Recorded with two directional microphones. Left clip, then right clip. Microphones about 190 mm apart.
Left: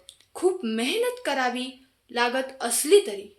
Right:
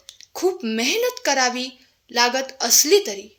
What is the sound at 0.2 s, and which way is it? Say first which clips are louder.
A child's voice: right 2 dB; 25° right (ahead or behind).